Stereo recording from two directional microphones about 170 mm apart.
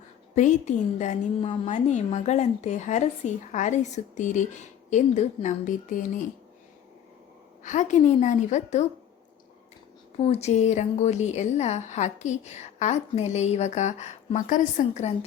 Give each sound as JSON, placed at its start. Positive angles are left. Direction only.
{"t": 0.3, "sound": "speech", "side_deg": 45}
{"t": 7.6, "sound": "speech", "side_deg": 45}
{"t": 10.2, "sound": "a woman's voice", "side_deg": 40}